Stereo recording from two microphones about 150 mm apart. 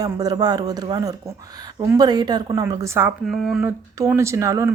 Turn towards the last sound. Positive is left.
turn(degrees=-20)  # may be behind; listen again after turning